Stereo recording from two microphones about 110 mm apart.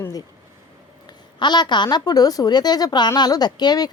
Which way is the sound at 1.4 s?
40° left (ahead or behind).